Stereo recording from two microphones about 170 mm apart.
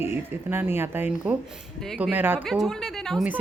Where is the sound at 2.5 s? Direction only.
Centre (ahead or behind).